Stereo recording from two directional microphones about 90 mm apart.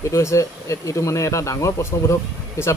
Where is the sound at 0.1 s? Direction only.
35° left (ahead or behind).